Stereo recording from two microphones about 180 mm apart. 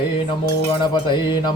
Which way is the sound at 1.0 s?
25° left (ahead or behind).